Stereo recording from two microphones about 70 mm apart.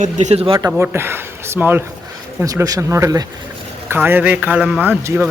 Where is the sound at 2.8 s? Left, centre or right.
Right.